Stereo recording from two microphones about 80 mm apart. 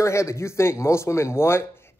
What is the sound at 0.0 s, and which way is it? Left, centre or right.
A man's voice, left.